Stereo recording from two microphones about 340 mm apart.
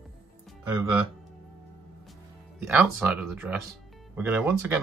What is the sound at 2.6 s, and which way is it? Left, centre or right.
Speech, centre.